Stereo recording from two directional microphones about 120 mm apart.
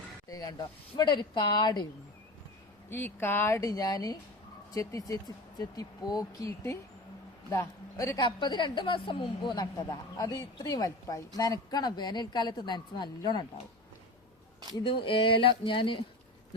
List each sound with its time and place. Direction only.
0.3 s a woman's voice: 30° left (ahead or behind)
2.9 s a woman's voice: 15° left (ahead or behind); by 13.4 s 35° left (ahead or behind)
14.8 s speech: 45° left (ahead or behind)